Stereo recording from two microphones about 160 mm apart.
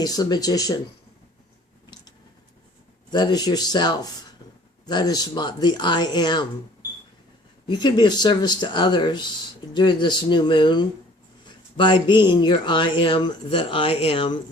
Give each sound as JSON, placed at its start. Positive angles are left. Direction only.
{"t": 0.0, "sound": "speech", "side_deg": 25}
{"t": 3.1, "sound": "speech", "side_deg": 25}
{"t": 7.7, "sound": "speech", "side_deg": 30}